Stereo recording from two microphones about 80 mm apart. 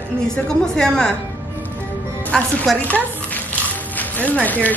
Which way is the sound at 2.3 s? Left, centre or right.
Centre.